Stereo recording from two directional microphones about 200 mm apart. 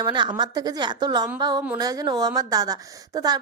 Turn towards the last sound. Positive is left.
turn(degrees=-20)  # may be behind; listen again after turning